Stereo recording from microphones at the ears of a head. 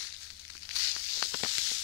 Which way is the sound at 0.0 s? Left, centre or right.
Left.